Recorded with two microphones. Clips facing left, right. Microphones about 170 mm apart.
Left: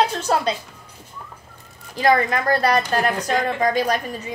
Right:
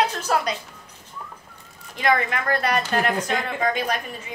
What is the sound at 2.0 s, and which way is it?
A woman's voice, 35° left (ahead or behind).